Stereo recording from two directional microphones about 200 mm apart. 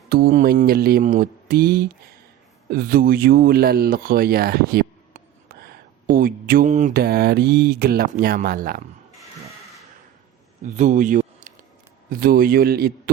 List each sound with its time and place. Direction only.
0.1 s speech: 45° right (ahead or behind)
10.6 s a sound: 40° right (ahead or behind)
12.1 s speech: 45° right (ahead or behind)